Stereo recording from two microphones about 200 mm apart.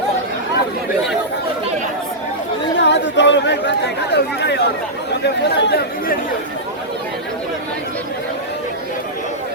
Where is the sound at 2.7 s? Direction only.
60° left (ahead or behind).